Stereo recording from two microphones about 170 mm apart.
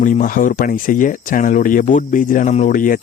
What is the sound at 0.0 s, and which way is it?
Speech, 50° left (ahead or behind).